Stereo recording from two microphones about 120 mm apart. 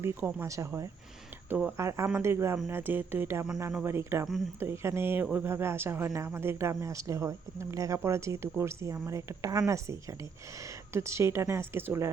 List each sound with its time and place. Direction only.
0.0 s speech: 15° right (ahead or behind)
0.4 s speech: 25° right (ahead or behind)
1.5 s speech: 15° right (ahead or behind)
1.7 s speech: 25° right (ahead or behind)